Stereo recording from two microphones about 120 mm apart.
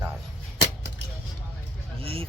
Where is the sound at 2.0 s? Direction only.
50° right (ahead or behind).